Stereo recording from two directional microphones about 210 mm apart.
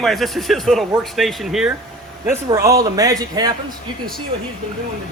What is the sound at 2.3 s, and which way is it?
A man's voice, 15° right (ahead or behind).